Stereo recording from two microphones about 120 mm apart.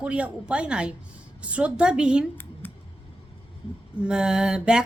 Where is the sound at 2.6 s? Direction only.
15° left (ahead or behind).